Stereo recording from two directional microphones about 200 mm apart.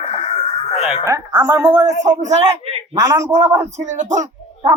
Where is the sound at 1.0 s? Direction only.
15° right (ahead or behind).